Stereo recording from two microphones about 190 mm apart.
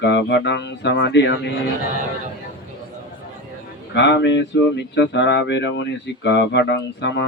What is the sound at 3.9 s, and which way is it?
Speech, 65° left (ahead or behind).